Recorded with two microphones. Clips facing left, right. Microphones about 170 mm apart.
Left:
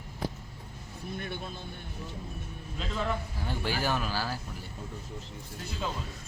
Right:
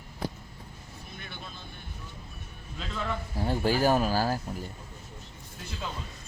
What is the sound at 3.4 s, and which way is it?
Speech, 40° right (ahead or behind).